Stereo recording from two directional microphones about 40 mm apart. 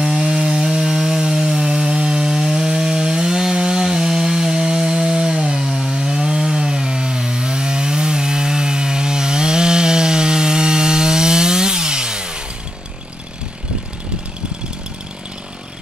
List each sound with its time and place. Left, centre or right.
0.0 s wood: centre